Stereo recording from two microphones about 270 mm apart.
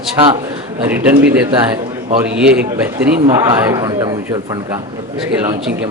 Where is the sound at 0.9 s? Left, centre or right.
Centre.